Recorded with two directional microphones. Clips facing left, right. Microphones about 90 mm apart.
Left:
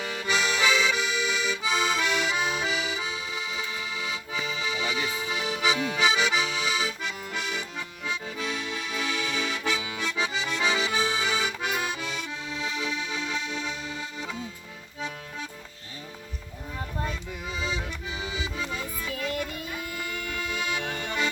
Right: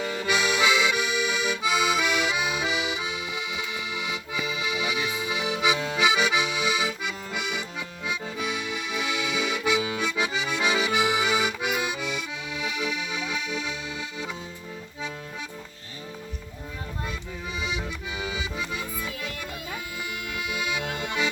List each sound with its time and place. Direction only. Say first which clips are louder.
0.0 s accordion: right 3 dB; 25° right (ahead or behind)
0.3 s accordion: right 1 dB; 10° right (ahead or behind)
6.1 s accordion: right 2 dB; 10° right (ahead or behind)
17.6 s accordion: even; 10° right (ahead or behind)
18.8 s music: left 1 dB; 40° left (ahead or behind)
20.5 s accordion: right 2 dB; 10° right (ahead or behind)